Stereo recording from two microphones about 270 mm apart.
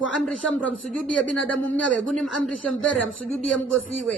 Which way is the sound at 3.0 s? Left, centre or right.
Left.